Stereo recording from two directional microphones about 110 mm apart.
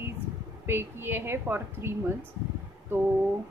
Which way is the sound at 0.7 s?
20° right (ahead or behind).